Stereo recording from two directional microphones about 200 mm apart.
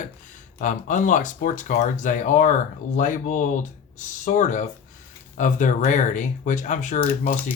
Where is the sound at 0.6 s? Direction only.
40° left (ahead or behind).